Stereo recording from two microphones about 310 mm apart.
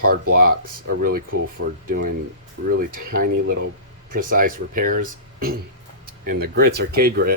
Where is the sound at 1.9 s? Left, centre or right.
Right.